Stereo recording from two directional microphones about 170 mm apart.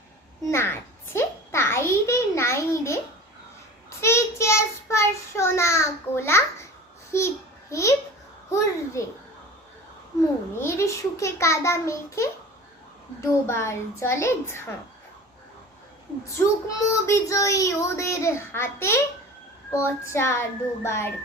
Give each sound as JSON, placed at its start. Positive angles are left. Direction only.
{"t": 0.4, "sound": "child singing", "side_deg": 15}
{"t": 10.6, "sound": "child singing", "side_deg": 15}
{"t": 16.4, "sound": "child singing", "side_deg": 20}